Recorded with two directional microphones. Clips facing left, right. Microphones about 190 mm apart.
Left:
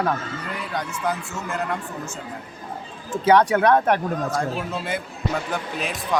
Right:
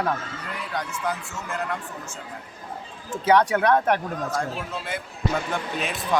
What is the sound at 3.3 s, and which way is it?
Speech, 35° left (ahead or behind).